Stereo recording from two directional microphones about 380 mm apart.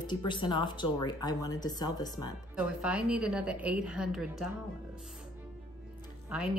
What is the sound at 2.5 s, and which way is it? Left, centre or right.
A woman's voice, centre.